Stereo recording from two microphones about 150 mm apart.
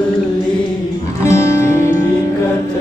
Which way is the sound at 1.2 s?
20° left (ahead or behind).